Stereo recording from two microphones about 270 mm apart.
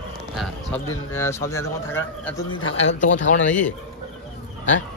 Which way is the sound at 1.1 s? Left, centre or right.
Centre.